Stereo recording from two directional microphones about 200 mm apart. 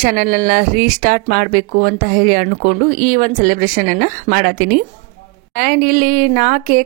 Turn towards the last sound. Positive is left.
turn(degrees=-45)  # may be behind; listen again after turning